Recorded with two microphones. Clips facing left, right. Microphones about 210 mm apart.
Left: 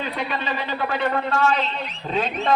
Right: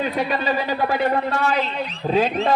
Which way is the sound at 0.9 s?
35° right (ahead or behind).